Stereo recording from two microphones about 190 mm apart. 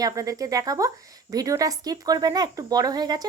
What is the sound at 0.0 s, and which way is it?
Speech, 20° right (ahead or behind).